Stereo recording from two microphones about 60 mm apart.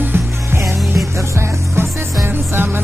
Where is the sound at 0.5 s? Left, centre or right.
Right.